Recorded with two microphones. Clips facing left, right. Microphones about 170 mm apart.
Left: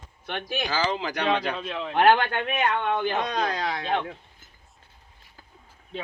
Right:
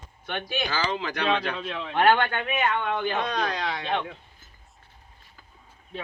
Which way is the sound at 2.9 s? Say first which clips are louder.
Left 1 dB; 15° left (ahead or behind).